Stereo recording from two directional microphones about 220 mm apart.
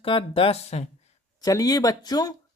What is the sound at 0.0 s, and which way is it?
Speech, 25° left (ahead or behind).